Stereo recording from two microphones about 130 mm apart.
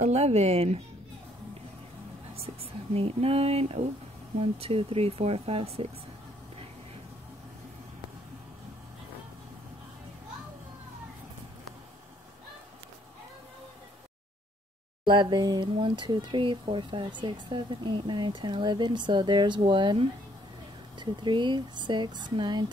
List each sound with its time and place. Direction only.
0.0 s speech: 55° right (ahead or behind)
2.3 s speech: 50° right (ahead or behind)
15.0 s speech: 35° right (ahead or behind)